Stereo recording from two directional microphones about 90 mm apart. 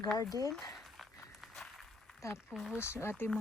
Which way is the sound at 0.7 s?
Centre (ahead or behind).